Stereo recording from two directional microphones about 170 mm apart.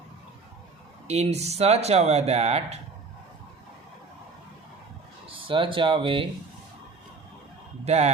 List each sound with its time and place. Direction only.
1.0 s speech: 40° right (ahead or behind)
5.3 s speech: 30° right (ahead or behind)
7.9 s speech: 40° right (ahead or behind)